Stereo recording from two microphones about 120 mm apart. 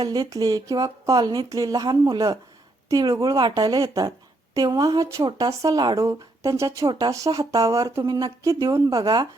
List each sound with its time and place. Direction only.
0.0 s speech: 35° right (ahead or behind)
6.1 s speech: 25° right (ahead or behind)